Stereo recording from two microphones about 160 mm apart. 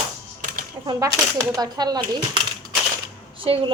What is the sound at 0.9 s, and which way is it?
A woman's voice, 20° right (ahead or behind).